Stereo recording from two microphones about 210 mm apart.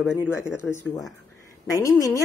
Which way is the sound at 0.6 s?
10° left (ahead or behind).